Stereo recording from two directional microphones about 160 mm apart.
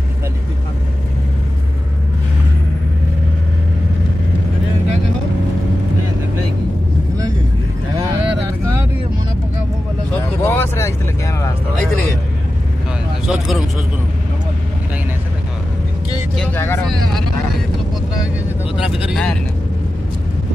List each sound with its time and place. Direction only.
10.4 s vehicle: 15° left (ahead or behind)
13.3 s vehicle: 5° right (ahead or behind)
16.3 s vehicle: 15° left (ahead or behind)
18.8 s vehicle: 5° right (ahead or behind)